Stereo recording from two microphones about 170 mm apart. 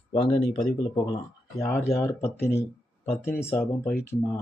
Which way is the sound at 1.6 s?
15° left (ahead or behind).